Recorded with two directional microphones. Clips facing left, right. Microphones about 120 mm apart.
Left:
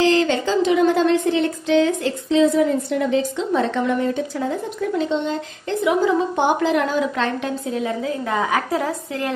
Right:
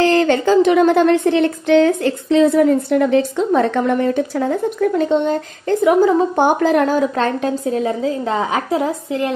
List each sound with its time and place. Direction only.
0.0 s speech: 50° right (ahead or behind); by 9.3 s 20° right (ahead or behind)